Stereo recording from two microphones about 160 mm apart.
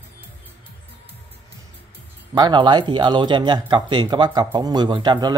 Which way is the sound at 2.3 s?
25° right (ahead or behind).